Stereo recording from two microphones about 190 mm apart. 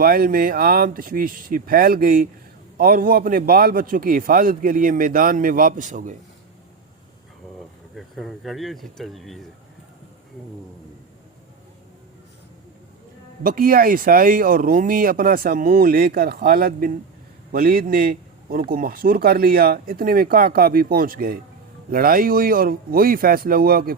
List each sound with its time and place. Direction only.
0.0 s speech: 50° right (ahead or behind)
7.9 s speech: centre (ahead or behind)
13.4 s a man's voice: 50° right (ahead or behind)